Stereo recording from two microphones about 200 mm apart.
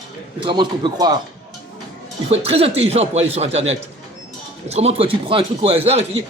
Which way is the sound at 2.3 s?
30° right (ahead or behind).